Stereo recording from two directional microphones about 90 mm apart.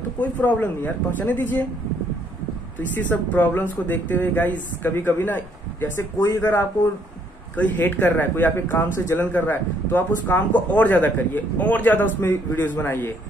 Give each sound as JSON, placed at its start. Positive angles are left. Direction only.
{"t": 0.2, "sound": "speech", "side_deg": 20}
{"t": 3.0, "sound": "speech", "side_deg": 15}
{"t": 7.5, "sound": "speech", "side_deg": 15}